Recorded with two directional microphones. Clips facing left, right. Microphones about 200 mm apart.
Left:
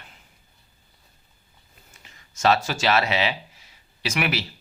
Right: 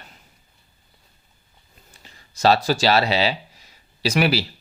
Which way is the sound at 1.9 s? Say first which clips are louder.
Right 4 dB; 35° right (ahead or behind).